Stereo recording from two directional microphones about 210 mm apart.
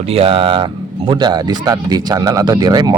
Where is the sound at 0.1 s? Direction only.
25° right (ahead or behind).